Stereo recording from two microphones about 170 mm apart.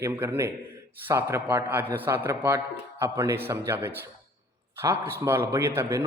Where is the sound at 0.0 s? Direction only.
10° right (ahead or behind).